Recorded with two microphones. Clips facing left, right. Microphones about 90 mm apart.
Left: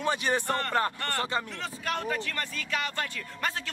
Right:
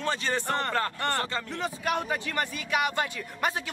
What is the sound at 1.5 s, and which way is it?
Speech, 15° right (ahead or behind).